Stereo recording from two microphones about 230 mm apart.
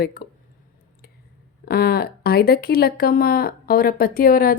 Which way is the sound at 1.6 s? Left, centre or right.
Left.